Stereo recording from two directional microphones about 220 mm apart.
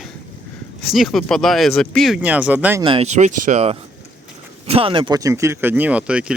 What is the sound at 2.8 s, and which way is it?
Speech, 25° right (ahead or behind).